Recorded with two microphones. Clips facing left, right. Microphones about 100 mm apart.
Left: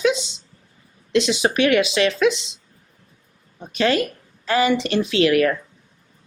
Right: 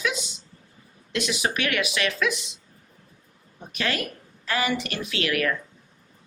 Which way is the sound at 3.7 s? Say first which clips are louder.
Left 9 dB; 25° left (ahead or behind).